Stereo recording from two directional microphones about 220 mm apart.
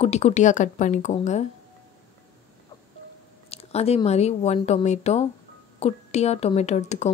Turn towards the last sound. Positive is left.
turn(degrees=30)  # may be behind; listen again after turning